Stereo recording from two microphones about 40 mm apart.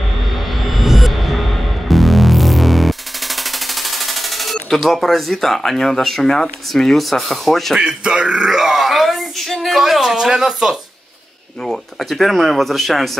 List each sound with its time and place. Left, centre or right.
0.7 s music: centre
3.5 s a sound: centre
5.6 s speech: centre
7.8 s a man's voice: right
8.5 s a woman's voice: centre
11.6 s speech: centre